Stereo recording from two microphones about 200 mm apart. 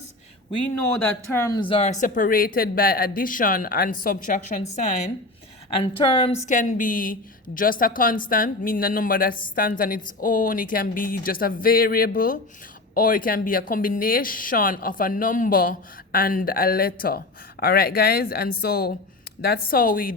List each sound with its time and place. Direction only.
1.0 s speech: 10° left (ahead or behind)
1.5 s speech: 25° left (ahead or behind); by 20.1 s 45° left (ahead or behind)